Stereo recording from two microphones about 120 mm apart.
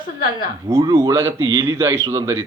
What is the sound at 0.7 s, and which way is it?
A man's voice, 25° right (ahead or behind).